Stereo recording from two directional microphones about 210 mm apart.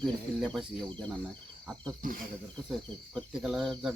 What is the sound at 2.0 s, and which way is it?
Speech, 40° right (ahead or behind).